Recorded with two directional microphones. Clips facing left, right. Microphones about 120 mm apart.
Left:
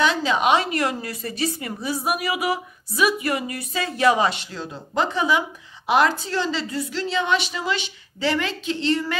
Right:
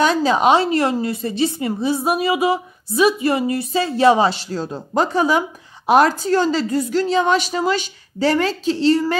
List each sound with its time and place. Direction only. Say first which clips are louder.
0.0 s a woman's voice: right 5 dB; 40° right (ahead or behind)